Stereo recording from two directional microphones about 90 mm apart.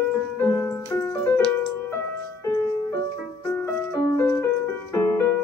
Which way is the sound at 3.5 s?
20° left (ahead or behind).